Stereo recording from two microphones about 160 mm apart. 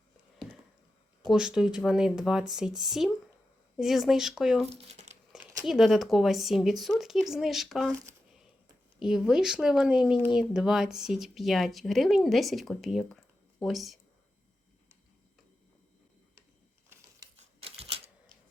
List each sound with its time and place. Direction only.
1.2 s speech: 5° right (ahead or behind)
4.7 s speech: 45° right (ahead or behind)
5.6 s speech: centre (ahead or behind)
9.0 s speech: 5° right (ahead or behind)
17.3 s typewriter: 40° right (ahead or behind)